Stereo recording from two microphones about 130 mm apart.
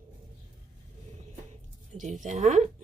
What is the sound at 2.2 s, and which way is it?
Speech, 65° right (ahead or behind).